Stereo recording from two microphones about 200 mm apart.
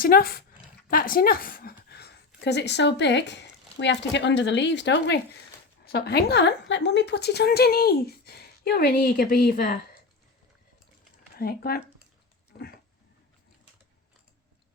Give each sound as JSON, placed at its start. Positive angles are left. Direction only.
{"t": 0.0, "sound": "a woman's voice", "side_deg": 50}
{"t": 11.3, "sound": "a woman's voice", "side_deg": 50}